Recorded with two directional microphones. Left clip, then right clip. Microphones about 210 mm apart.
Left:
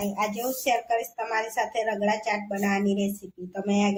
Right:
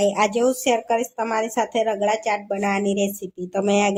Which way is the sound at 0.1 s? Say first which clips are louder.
Right 9 dB; 50° right (ahead or behind).